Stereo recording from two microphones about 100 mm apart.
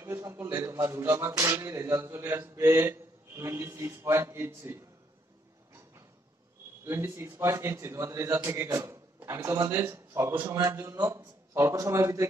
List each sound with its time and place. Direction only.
0.0 s a man's voice: 25° right (ahead or behind)
6.8 s a man's voice: 25° right (ahead or behind)